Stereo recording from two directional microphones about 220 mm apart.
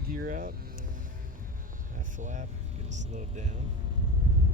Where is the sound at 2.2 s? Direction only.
35° right (ahead or behind).